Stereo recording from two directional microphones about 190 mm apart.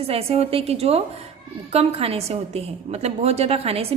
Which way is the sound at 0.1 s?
30° right (ahead or behind).